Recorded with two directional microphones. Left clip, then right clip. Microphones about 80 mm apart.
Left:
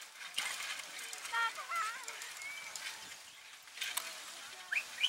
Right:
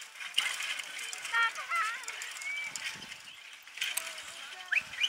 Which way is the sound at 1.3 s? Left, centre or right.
Right.